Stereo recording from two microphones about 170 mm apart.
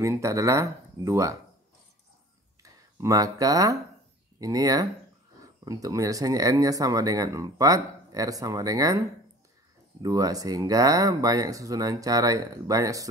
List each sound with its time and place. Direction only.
0.0 s speech: 15° right (ahead or behind)
2.6 s speech: 20° right (ahead or behind)
10.0 s speech: 20° right (ahead or behind)